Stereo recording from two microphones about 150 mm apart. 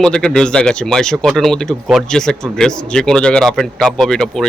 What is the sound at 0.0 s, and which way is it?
Speech, 5° left (ahead or behind).